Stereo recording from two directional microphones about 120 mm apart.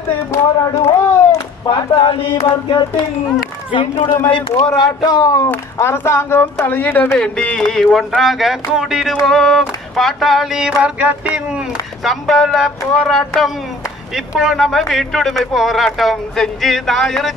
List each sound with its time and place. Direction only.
0.3 s a sound: 25° left (ahead or behind)
1.7 s speech: 40° left (ahead or behind)
2.3 s chant: 55° left (ahead or behind)
2.7 s speech: 40° left (ahead or behind)
4.6 s speech: 30° left (ahead or behind)
5.5 s speech: 20° left (ahead or behind); by 10.7 s 5° right (ahead or behind)
10.8 s music: 10° right (ahead or behind)
11.3 s a sound: 5° right (ahead or behind)
12.0 s speech: centre (ahead or behind)